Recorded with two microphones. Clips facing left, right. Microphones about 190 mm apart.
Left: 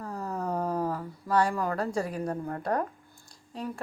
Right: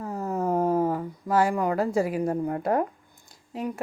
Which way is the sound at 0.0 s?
25° right (ahead or behind).